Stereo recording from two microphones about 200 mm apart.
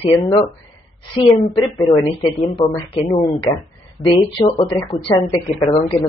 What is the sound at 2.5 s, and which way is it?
Speech, 25° left (ahead or behind).